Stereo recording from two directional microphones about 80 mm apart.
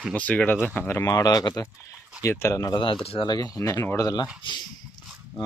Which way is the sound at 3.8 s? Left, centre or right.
Left.